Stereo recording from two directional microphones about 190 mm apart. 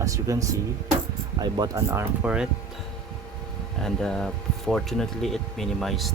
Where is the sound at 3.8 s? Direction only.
5° left (ahead or behind).